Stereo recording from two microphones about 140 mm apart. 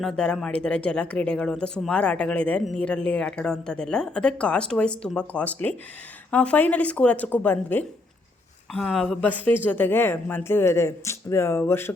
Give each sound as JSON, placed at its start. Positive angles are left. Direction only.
{"t": 0.0, "sound": "speech", "side_deg": 5}